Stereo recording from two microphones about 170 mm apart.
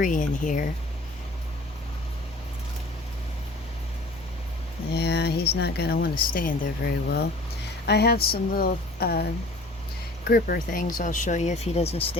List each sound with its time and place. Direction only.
0.0 s speech: 50° left (ahead or behind)
4.9 s speech: 75° left (ahead or behind); by 12.1 s 35° left (ahead or behind)